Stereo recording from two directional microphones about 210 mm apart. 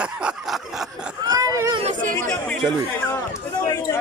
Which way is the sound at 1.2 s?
15° right (ahead or behind).